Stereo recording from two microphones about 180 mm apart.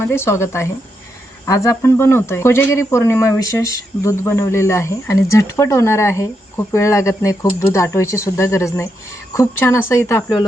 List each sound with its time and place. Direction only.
0.0 s speech: 15° left (ahead or behind)